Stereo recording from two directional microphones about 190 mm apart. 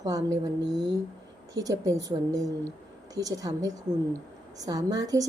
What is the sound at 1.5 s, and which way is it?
A woman's voice, 15° right (ahead or behind).